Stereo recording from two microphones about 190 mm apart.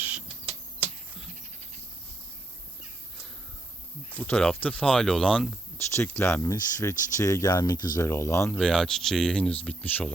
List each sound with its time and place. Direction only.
4.2 s speech: 10° left (ahead or behind)
8.5 s speech: 5° left (ahead or behind)